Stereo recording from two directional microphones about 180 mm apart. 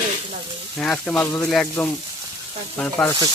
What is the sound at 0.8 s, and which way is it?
Speech, 10° left (ahead or behind).